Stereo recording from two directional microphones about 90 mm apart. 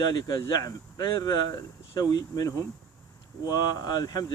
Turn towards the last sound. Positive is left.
turn(degrees=45)  # may be behind; listen again after turning